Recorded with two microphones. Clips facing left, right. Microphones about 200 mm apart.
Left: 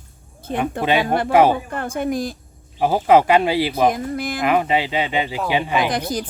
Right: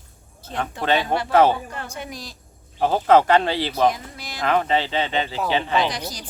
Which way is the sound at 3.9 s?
55° left (ahead or behind).